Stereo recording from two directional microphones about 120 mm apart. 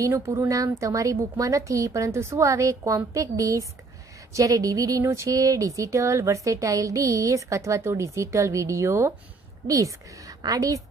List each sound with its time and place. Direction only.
0.0 s speech: 25° right (ahead or behind)